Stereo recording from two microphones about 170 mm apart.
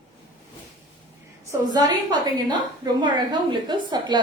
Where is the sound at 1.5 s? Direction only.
25° right (ahead or behind).